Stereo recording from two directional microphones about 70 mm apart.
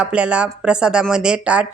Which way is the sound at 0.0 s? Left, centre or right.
Centre.